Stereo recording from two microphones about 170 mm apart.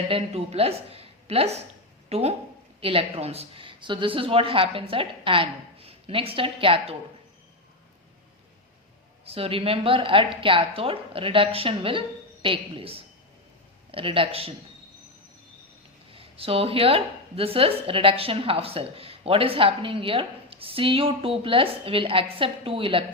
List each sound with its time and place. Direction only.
0.1 s a woman's voice: 35° right (ahead or behind)
9.2 s a woman's voice: 35° right (ahead or behind)
16.1 s a woman's voice: 35° right (ahead or behind)